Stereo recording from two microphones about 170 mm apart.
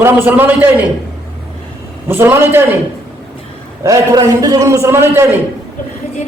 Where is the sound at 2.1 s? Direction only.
10° right (ahead or behind).